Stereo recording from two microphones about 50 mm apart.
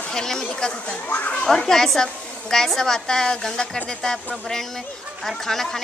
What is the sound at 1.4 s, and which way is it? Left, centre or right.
A woman's voice, centre.